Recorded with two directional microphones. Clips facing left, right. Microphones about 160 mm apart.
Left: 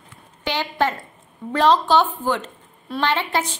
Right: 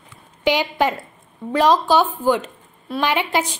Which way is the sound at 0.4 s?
15° right (ahead or behind).